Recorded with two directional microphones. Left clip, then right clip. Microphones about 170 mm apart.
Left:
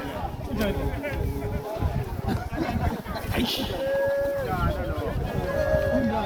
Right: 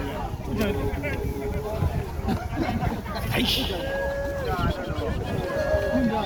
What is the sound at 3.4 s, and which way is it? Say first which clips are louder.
Speech: right 3 dB; 70° left (ahead or behind).